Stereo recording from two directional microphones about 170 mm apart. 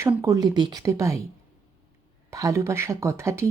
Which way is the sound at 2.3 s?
20° right (ahead or behind).